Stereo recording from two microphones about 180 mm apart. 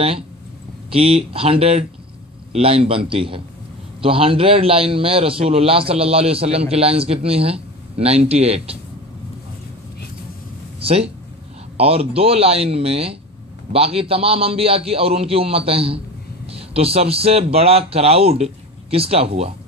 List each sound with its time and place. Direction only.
0.8 s a man's voice: 30° right (ahead or behind)
10.8 s a man's voice: 30° right (ahead or behind)